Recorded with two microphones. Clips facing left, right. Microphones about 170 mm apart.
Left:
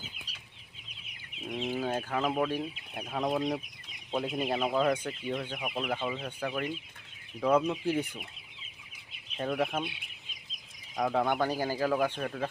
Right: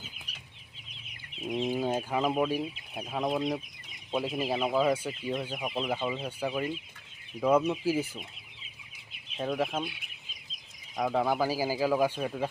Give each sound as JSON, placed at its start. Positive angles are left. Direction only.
{"t": 1.5, "sound": "chicken", "side_deg": -10}
{"t": 5.6, "sound": "speech", "side_deg": 5}
{"t": 5.9, "sound": "chicken", "side_deg": -10}
{"t": 7.3, "sound": "speech", "side_deg": -10}
{"t": 9.4, "sound": "speech", "side_deg": 0}
{"t": 10.9, "sound": "chicken", "side_deg": -5}